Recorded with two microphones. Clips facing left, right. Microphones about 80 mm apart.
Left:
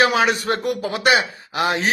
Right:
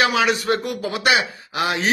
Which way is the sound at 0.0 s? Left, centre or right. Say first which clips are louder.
Left 1 dB; left.